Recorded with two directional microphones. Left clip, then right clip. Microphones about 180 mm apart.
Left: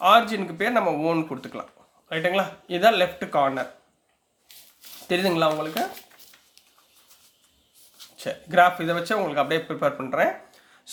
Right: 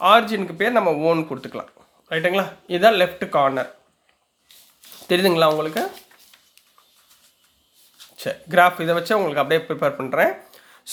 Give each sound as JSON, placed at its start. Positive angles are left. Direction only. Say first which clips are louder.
{"t": 0.0, "sound": "speech", "louder": "right 2 dB", "side_deg": -25}
{"t": 5.0, "sound": "speech", "louder": "right 5 dB", "side_deg": -35}
{"t": 8.1, "sound": "speech", "louder": "right 3 dB", "side_deg": -25}